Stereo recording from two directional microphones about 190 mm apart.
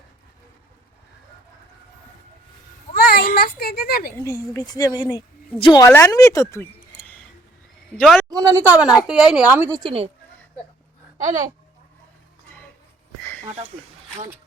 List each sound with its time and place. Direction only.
2.9 s a sound: 55° left (ahead or behind)
4.1 s a woman's voice: 15° left (ahead or behind)
7.9 s speech: centre (ahead or behind)
8.3 s a woman's voice: 15° right (ahead or behind)